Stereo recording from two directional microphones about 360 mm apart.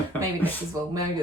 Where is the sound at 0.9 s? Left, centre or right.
Centre.